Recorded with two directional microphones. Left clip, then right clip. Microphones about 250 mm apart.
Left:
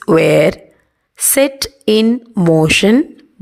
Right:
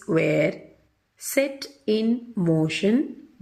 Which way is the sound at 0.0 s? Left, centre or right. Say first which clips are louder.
Left 12 dB; left.